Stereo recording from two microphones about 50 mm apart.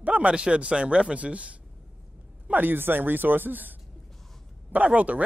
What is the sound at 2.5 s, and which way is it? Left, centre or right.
A man's voice, right.